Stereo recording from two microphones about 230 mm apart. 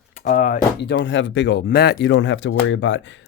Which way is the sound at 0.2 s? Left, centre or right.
Left.